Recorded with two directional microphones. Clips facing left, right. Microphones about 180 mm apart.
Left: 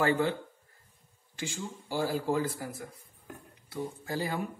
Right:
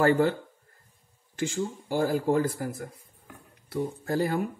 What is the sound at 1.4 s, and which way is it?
Speech, 50° right (ahead or behind).